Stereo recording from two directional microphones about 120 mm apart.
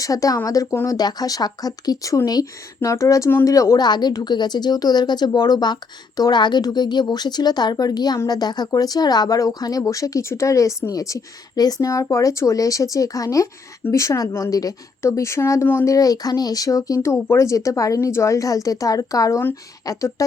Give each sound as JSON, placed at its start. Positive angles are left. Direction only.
{"t": 0.0, "sound": "speech", "side_deg": 30}
{"t": 15.9, "sound": "speech", "side_deg": 30}